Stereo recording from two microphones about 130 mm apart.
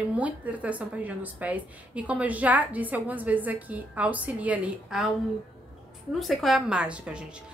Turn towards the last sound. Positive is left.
turn(degrees=-5)  # may be behind; listen again after turning